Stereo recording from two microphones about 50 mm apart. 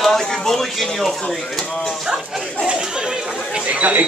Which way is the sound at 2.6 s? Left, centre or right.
Centre.